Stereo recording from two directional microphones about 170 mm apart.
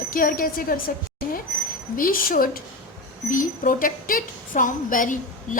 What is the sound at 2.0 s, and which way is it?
A woman's voice, 55° left (ahead or behind).